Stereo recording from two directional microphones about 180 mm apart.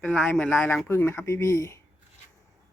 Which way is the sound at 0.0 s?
5° left (ahead or behind).